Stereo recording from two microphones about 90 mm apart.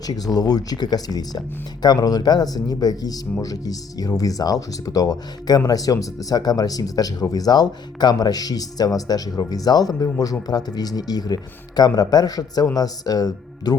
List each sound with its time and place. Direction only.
0.3 s speech: 45° left (ahead or behind)